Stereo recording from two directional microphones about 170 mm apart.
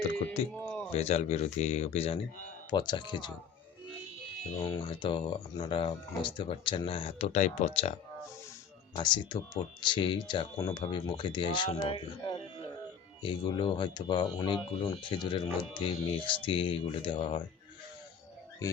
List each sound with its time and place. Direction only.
0.5 s a sound: 10° left (ahead or behind)
0.9 s speech: 40° left (ahead or behind)
2.6 s speech: 25° left (ahead or behind)
4.8 s speech: 30° left (ahead or behind)
9.0 s speech: 25° left (ahead or behind)